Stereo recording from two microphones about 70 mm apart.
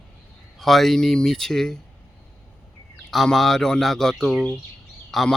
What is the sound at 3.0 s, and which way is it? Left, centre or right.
Speech, centre.